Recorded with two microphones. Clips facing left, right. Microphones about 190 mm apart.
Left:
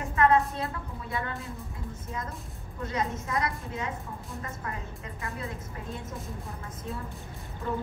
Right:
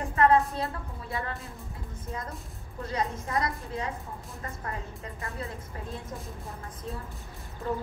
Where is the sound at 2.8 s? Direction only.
30° right (ahead or behind).